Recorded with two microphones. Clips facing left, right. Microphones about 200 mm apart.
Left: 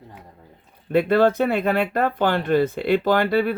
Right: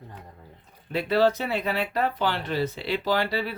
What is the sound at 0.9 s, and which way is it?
Speech, 55° left (ahead or behind).